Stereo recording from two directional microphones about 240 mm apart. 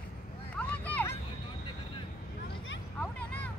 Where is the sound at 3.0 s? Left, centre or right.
Centre.